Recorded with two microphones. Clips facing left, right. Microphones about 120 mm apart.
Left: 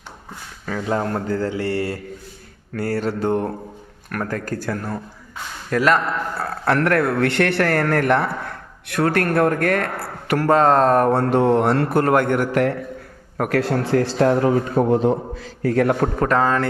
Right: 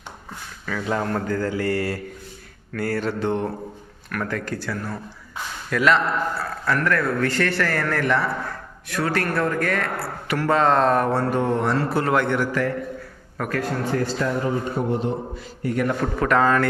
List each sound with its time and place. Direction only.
0.6 s speech: 30° left (ahead or behind)
6.4 s speech: 65° left (ahead or behind); by 12.5 s 50° left (ahead or behind)
12.5 s a man's voice: 65° left (ahead or behind)
13.5 s speech: 85° left
15.4 s a man's voice: 90° left
16.2 s speech: 30° left (ahead or behind)